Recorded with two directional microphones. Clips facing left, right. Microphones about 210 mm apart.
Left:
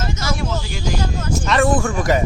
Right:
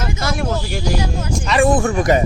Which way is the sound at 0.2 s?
55° right (ahead or behind).